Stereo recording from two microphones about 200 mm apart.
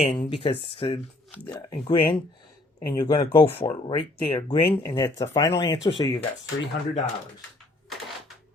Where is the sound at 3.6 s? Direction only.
25° left (ahead or behind).